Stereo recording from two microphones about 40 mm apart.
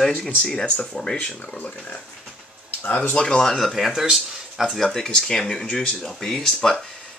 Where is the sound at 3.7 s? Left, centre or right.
Centre.